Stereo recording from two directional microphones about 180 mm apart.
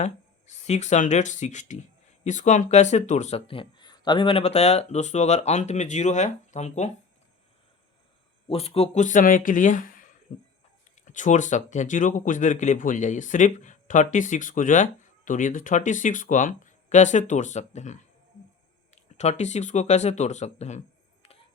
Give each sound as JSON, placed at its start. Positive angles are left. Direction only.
{"t": 0.0, "sound": "speech", "side_deg": 40}
{"t": 8.4, "sound": "speech", "side_deg": 35}